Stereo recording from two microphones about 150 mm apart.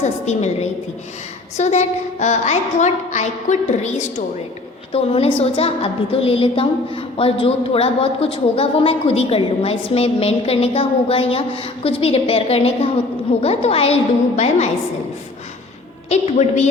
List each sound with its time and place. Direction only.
0.0 s a woman's voice: 50° left (ahead or behind)
4.9 s a woman's voice: 40° left (ahead or behind)
16.0 s a woman's voice: 50° left (ahead or behind)